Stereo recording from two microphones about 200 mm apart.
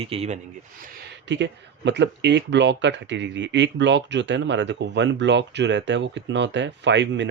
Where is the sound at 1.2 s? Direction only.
65° right (ahead or behind).